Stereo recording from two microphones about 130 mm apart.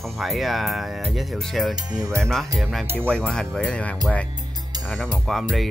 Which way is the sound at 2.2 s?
5° left (ahead or behind).